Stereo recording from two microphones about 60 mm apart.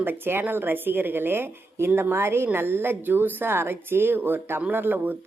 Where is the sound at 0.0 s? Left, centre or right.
Right.